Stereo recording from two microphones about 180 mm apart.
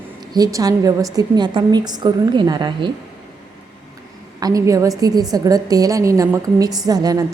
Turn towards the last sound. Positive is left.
turn(degrees=-20)  # may be behind; listen again after turning